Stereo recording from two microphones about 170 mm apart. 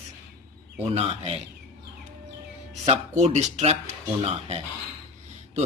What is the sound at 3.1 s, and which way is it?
Speech, 45° right (ahead or behind).